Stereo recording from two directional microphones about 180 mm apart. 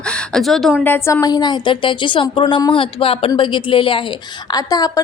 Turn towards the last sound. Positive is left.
turn(degrees=20)  # may be behind; listen again after turning